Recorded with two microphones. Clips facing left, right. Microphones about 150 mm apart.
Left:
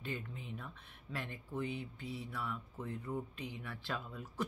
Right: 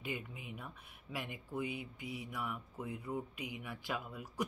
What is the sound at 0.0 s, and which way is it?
Speech, 10° right (ahead or behind).